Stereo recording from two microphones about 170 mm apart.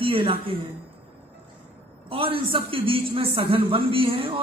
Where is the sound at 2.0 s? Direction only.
35° right (ahead or behind).